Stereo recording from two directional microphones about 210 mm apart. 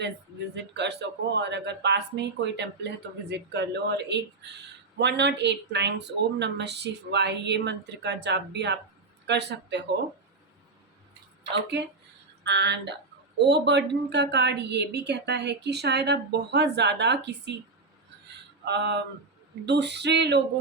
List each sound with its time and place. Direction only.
0.5 s speech: 55° right (ahead or behind)
11.5 s a woman's voice: 55° right (ahead or behind)
18.6 s a woman's voice: 55° right (ahead or behind)